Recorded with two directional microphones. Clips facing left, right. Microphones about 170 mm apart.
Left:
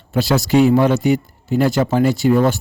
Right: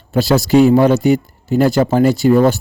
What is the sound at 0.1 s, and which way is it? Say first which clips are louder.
A man's voice: right 3 dB; 35° right (ahead or behind).